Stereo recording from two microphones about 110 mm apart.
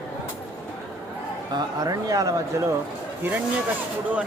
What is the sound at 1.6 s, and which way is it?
Speech, 35° right (ahead or behind).